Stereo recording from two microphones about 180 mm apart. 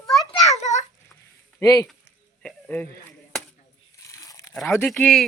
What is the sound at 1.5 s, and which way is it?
Speech, 20° left (ahead or behind).